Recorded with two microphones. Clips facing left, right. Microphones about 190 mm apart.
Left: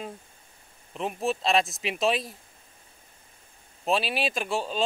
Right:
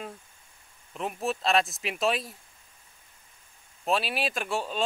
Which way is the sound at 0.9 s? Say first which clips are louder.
Left 2 dB; 25° left (ahead or behind).